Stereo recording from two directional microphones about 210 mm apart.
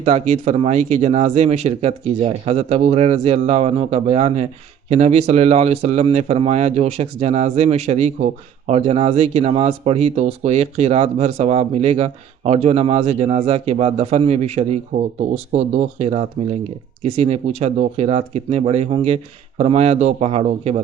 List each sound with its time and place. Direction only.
0.0 s speech: 30° right (ahead or behind)